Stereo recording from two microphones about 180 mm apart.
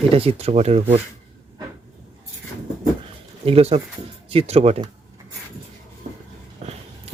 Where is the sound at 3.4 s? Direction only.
35° right (ahead or behind).